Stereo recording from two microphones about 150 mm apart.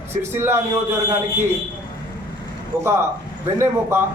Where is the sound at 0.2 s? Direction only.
15° right (ahead or behind).